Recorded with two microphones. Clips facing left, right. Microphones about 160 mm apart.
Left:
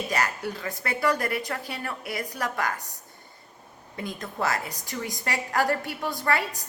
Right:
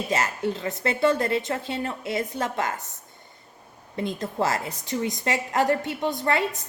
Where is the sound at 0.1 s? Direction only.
25° right (ahead or behind).